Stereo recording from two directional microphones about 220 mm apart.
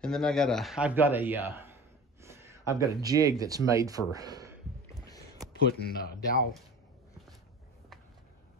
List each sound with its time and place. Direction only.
0.0 s speech: 5° left (ahead or behind); by 4.6 s 15° right (ahead or behind)
5.6 s a man's voice: 45° left (ahead or behind)